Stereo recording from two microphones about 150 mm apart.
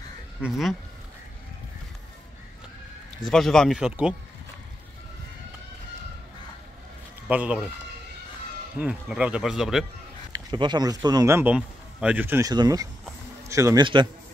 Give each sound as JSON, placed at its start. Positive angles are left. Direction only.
{"t": 0.4, "sound": "speech", "side_deg": 0}
{"t": 3.3, "sound": "speech", "side_deg": 5}
{"t": 7.2, "sound": "speech", "side_deg": -10}
{"t": 8.7, "sound": "speech", "side_deg": -10}
{"t": 10.3, "sound": "a man's voice", "side_deg": -30}